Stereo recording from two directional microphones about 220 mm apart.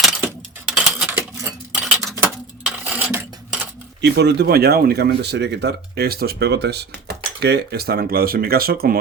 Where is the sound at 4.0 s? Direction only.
50° right (ahead or behind).